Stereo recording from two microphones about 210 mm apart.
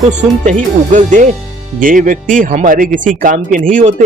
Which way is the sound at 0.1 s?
35° right (ahead or behind).